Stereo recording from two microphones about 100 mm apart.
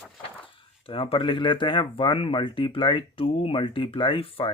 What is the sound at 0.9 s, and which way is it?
Speech, 65° left (ahead or behind).